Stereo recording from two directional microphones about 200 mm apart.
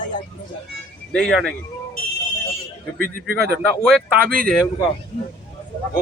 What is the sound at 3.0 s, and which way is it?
Speech, 50° right (ahead or behind).